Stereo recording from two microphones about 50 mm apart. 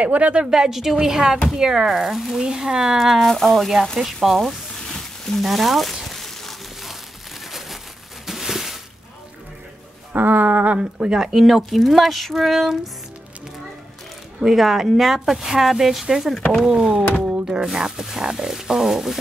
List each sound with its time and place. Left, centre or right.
0.0 s a woman's voice: right
0.4 s speech: centre
3.2 s speech: centre
5.4 s a sound: centre
8.3 s a sound: centre
10.1 s speech: right
10.8 s speech: centre
14.4 s speech: centre
17.2 s thunk: right
17.7 s speech: centre